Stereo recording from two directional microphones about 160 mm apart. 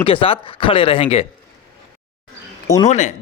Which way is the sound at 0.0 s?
35° left (ahead or behind).